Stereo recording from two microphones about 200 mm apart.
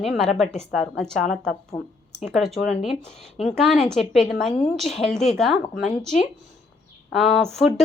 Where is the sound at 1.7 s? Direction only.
20° left (ahead or behind).